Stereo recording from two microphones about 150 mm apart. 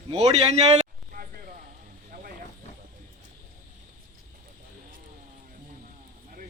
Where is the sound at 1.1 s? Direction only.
70° right (ahead or behind).